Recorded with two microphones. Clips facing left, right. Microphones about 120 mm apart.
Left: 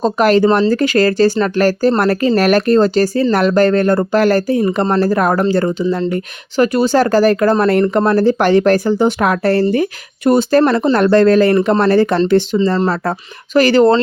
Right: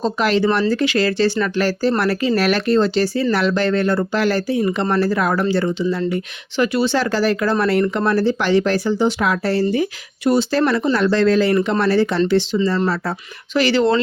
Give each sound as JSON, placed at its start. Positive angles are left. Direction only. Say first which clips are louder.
{"t": 0.0, "sound": "speech", "louder": "left 6 dB", "side_deg": 45}